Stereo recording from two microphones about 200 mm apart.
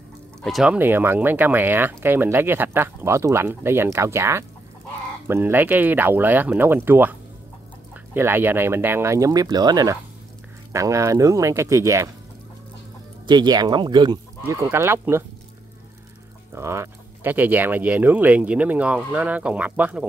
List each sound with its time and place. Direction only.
0.4 s speech: centre (ahead or behind)
13.3 s speech: 20° right (ahead or behind)
16.5 s speech: 15° right (ahead or behind)